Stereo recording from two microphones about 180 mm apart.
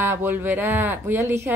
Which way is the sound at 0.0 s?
10° right (ahead or behind).